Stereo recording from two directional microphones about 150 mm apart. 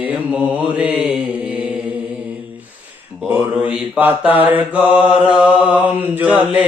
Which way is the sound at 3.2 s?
10° right (ahead or behind).